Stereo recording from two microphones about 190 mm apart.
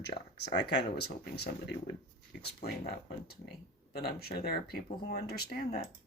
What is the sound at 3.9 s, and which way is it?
Speech, 55° left (ahead or behind).